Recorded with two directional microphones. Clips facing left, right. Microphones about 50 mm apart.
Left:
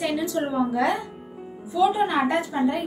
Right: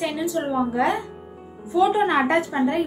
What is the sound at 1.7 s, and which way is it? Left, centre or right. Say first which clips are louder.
A woman's voice: right 2 dB; right.